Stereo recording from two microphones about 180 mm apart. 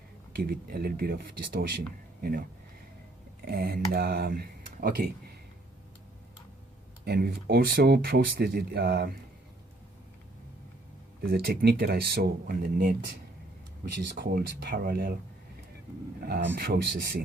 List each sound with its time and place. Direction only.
0.3 s speech: 55° right (ahead or behind)
7.0 s speech: 60° right (ahead or behind)
11.2 s speech: 60° right (ahead or behind)
14.2 s speech: 60° right (ahead or behind)
16.2 s speech: 60° right (ahead or behind)